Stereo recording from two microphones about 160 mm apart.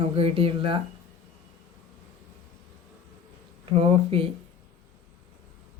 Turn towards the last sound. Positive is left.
turn(degrees=-35)  # may be behind; listen again after turning